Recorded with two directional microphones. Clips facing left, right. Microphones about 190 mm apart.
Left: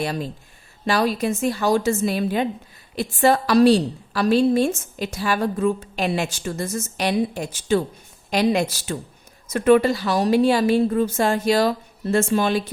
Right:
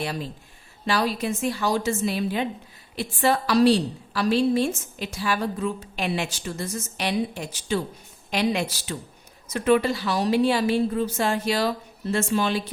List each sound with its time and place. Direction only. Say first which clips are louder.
0.9 s a woman's voice: left 4 dB; 45° left (ahead or behind)